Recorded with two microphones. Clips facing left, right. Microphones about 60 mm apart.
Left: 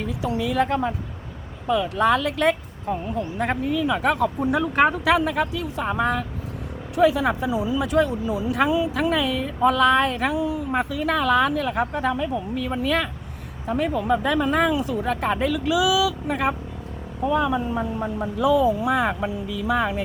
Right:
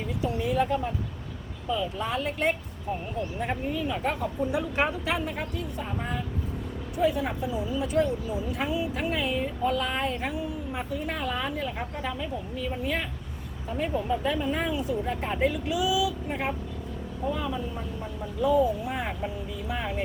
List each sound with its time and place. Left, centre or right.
0.0 s speech: left
4.4 s speech: left
13.7 s speech: left